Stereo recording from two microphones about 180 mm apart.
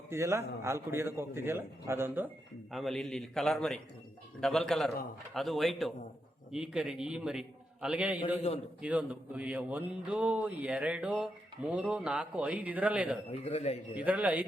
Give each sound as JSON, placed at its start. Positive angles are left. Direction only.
{"t": 0.1, "sound": "speech", "side_deg": -15}
{"t": 2.7, "sound": "a man's voice", "side_deg": 0}
{"t": 13.3, "sound": "a man's voice", "side_deg": 35}
{"t": 13.9, "sound": "speech", "side_deg": -10}